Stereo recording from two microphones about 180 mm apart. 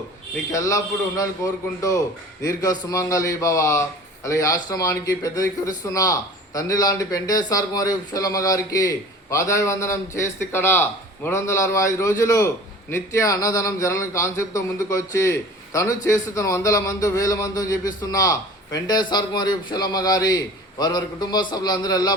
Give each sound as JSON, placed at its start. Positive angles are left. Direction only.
{"t": 0.5, "sound": "a man's voice", "side_deg": 20}